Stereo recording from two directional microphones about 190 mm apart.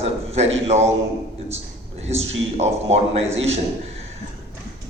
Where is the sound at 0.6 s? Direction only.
35° right (ahead or behind).